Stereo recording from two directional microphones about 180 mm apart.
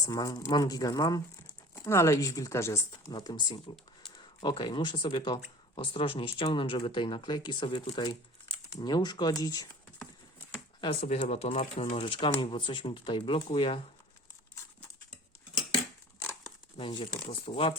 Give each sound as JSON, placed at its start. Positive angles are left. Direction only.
{"t": 0.1, "sound": "speech", "side_deg": 20}
{"t": 10.8, "sound": "speech", "side_deg": 35}
{"t": 16.7, "sound": "speech", "side_deg": 30}